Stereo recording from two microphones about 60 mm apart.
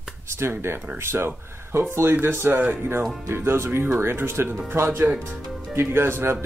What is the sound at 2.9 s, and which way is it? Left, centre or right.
Speech, right.